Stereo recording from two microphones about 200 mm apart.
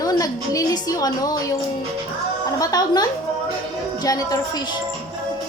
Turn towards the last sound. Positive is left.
turn(degrees=20)  # may be behind; listen again after turning